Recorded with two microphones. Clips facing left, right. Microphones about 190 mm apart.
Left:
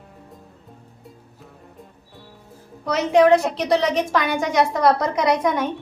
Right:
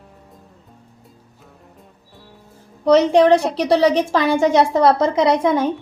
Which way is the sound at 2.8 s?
30° right (ahead or behind).